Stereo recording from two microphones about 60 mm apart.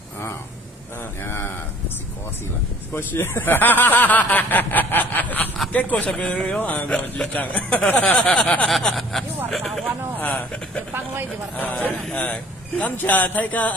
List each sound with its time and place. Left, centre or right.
1.2 s a sound: left
3.0 s speech: left
6.6 s speech: left
8.8 s vehicle: centre
9.5 s a sound: centre
10.3 s speech: centre
10.9 s speech: right
11.5 s speech: left